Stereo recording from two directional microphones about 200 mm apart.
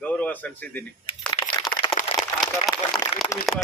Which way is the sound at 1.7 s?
25° left (ahead or behind).